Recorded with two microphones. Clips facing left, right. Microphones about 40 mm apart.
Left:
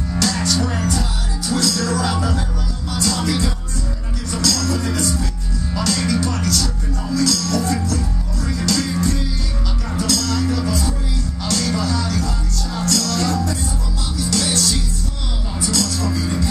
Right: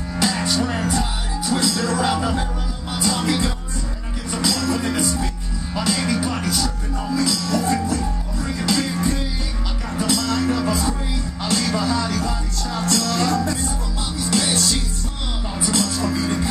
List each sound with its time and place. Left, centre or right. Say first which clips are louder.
0.2 s music: even; centre
9.9 s music: even; centre
14.3 s music: even; right
15.7 s music: even; centre